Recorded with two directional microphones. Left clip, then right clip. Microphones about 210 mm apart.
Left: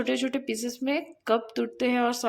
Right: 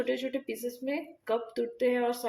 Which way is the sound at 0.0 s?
30° left (ahead or behind).